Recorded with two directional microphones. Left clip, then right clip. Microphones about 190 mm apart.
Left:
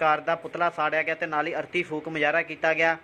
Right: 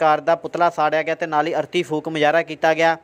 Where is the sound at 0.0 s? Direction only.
35° right (ahead or behind).